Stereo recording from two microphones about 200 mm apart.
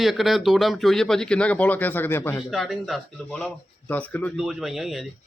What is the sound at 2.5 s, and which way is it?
Speech, centre (ahead or behind).